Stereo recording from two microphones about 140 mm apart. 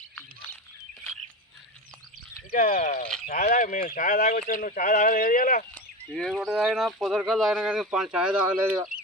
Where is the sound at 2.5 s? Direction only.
70° left (ahead or behind).